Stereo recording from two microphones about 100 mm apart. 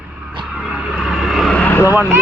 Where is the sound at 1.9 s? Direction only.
15° right (ahead or behind).